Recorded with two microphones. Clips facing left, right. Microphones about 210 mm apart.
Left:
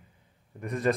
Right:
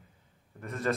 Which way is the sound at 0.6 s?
15° left (ahead or behind).